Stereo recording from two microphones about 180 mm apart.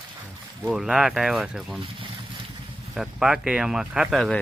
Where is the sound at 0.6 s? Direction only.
Centre (ahead or behind).